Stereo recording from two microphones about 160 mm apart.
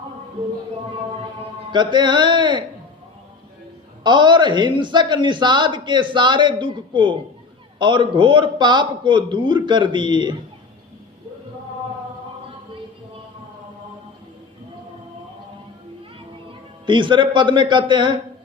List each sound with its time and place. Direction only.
1.7 s speech: 30° right (ahead or behind)
4.0 s speech: 30° right (ahead or behind)
16.8 s speech: 30° right (ahead or behind)